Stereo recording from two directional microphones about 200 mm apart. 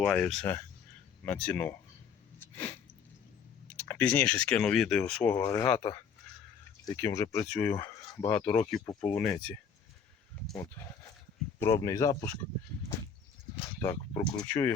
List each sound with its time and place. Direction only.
0.0 s speech: 5° left (ahead or behind)
2.4 s a sound: 10° left (ahead or behind)
3.8 s speech: 10° left (ahead or behind)
7.4 s speech: 5° left (ahead or behind)
7.7 s speech: 15° left (ahead or behind)
9.1 s speech: 5° left (ahead or behind)
10.6 s speech: 15° left (ahead or behind)
13.8 s speech: 20° left (ahead or behind)